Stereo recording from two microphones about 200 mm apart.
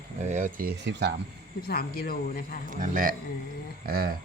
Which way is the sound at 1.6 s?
50° left (ahead or behind).